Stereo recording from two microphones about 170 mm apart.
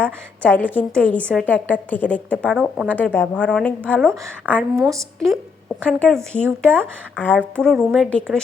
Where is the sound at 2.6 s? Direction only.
5° right (ahead or behind).